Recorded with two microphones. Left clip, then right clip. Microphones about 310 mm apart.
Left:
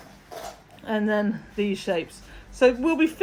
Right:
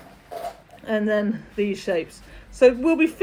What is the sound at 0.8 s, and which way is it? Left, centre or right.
Speech, centre.